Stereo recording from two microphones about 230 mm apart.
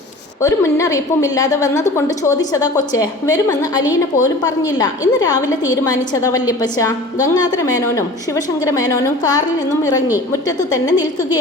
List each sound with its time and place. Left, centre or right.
0.4 s a woman's voice: centre
10.6 s a woman's voice: centre